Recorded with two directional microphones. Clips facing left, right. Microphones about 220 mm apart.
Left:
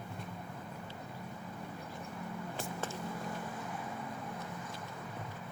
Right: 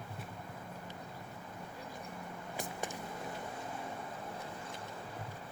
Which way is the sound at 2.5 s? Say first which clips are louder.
Right 2 dB; 15° right (ahead or behind).